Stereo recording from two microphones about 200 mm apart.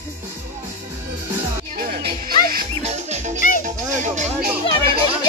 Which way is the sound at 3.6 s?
40° right (ahead or behind).